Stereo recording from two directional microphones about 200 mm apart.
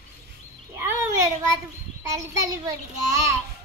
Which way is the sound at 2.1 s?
15° right (ahead or behind).